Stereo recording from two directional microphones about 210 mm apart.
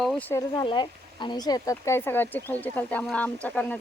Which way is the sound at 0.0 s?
5° left (ahead or behind).